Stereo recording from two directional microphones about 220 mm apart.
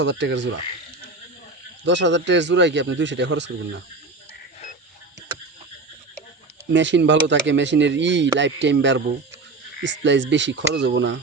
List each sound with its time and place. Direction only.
0.0 s speech: 55° right (ahead or behind)
1.8 s speech: 55° right (ahead or behind)
6.7 s speech: 55° right (ahead or behind)